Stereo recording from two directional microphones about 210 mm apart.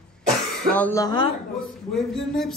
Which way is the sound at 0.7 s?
10° left (ahead or behind).